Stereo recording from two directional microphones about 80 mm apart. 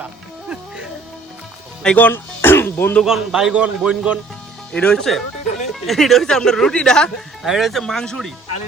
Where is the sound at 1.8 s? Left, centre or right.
Centre.